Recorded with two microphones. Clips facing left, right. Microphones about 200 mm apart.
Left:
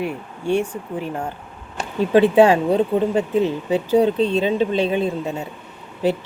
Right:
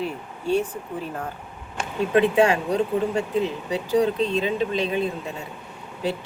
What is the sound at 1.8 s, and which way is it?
Speech, 30° left (ahead or behind).